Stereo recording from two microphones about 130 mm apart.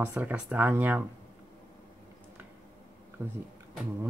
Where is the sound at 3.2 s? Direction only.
15° right (ahead or behind).